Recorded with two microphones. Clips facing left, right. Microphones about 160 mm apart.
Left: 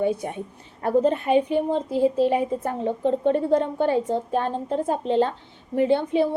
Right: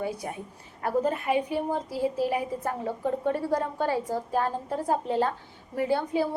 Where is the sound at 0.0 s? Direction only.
25° left (ahead or behind).